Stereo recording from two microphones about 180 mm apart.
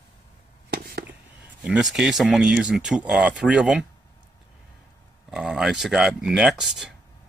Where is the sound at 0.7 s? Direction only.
60° right (ahead or behind).